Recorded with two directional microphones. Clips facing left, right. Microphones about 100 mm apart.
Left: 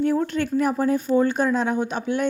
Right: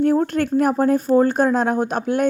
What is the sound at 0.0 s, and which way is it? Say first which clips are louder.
Speech: right 4 dB; 50° right (ahead or behind).